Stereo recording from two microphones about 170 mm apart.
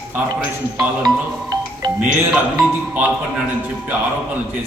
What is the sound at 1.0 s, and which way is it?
Music, 25° right (ahead or behind).